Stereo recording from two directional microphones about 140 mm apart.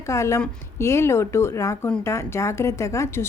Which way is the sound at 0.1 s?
20° left (ahead or behind).